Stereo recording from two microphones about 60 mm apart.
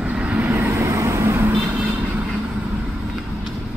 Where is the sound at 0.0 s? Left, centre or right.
Right.